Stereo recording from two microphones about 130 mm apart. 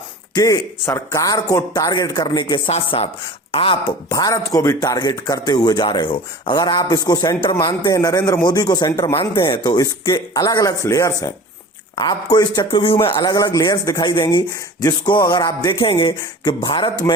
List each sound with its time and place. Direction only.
0.3 s speech: 25° left (ahead or behind)
4.1 s speech: 25° left (ahead or behind)
8.9 s speech: 20° left (ahead or behind)
9.1 s speech: 35° left (ahead or behind)
12.8 s speech: 45° left (ahead or behind)